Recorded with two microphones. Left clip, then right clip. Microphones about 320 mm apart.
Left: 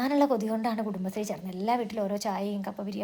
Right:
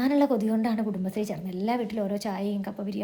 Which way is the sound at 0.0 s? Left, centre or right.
Centre.